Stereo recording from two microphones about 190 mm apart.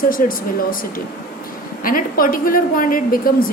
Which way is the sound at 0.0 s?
50° left (ahead or behind).